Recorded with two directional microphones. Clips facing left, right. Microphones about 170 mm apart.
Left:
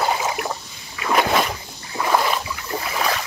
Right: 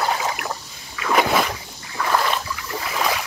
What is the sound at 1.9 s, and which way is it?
Boat, 15° left (ahead or behind).